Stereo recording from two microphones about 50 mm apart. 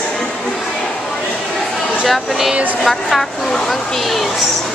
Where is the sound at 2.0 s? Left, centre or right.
Centre.